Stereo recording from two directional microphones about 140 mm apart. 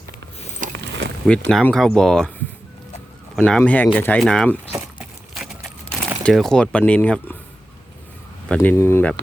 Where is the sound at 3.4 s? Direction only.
10° left (ahead or behind).